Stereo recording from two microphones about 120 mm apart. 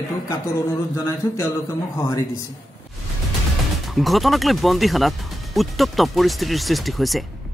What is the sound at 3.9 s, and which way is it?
Speech, centre (ahead or behind).